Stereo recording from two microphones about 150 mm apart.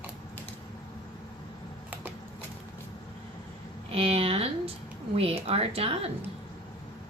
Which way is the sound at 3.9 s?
40° right (ahead or behind).